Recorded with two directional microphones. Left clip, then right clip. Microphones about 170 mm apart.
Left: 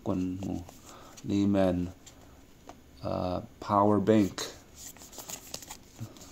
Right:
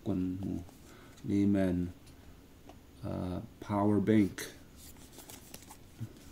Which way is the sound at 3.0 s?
20° right (ahead or behind).